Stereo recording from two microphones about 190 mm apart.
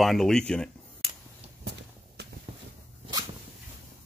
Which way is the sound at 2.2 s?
60° right (ahead or behind).